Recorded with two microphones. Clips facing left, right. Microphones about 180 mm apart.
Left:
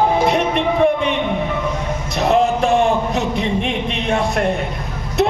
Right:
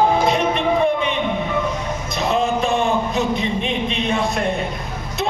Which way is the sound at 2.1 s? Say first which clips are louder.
Left 4 dB; 70° left (ahead or behind).